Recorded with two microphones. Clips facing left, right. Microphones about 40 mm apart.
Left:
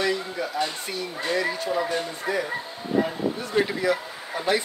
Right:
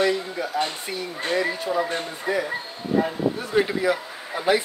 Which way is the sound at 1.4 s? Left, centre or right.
Centre.